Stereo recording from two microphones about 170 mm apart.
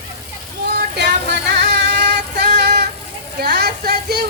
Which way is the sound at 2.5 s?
80° right.